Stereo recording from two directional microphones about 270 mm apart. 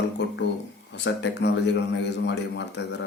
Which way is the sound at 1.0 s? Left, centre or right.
Left.